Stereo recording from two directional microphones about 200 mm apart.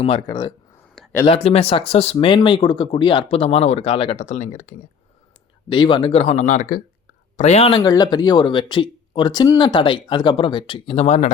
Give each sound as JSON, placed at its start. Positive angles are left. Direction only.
{"t": 0.0, "sound": "speech", "side_deg": 25}
{"t": 5.6, "sound": "speech", "side_deg": 25}
{"t": 7.8, "sound": "speech", "side_deg": 20}